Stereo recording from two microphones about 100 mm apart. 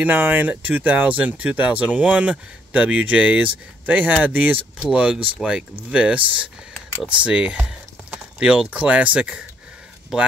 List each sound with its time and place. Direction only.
0.0 s speech: 15° right (ahead or behind)